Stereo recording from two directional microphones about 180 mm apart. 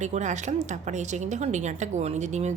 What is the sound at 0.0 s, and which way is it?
A woman's voice, 40° right (ahead or behind).